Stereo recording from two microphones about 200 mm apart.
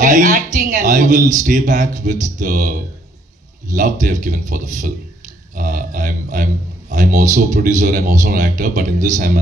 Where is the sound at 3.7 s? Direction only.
40° right (ahead or behind).